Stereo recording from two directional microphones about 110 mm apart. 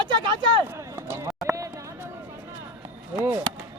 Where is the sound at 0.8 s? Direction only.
25° right (ahead or behind).